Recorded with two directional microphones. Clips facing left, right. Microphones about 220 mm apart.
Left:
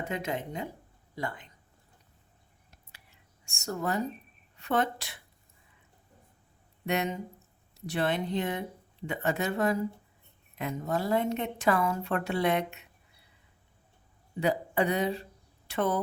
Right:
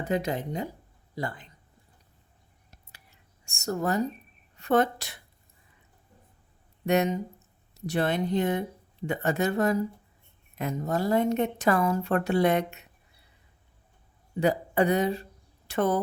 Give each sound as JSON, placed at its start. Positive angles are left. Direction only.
{"t": 0.1, "sound": "a woman's voice", "side_deg": -35}
{"t": 3.4, "sound": "a woman's voice", "side_deg": -40}
{"t": 6.8, "sound": "a woman's voice", "side_deg": -45}
{"t": 14.4, "sound": "speech", "side_deg": -45}